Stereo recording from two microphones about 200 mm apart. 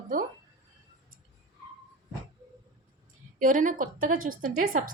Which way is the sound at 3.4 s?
40° right (ahead or behind).